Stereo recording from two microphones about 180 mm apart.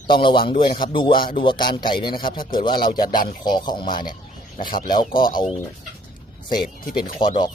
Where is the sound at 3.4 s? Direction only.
25° left (ahead or behind).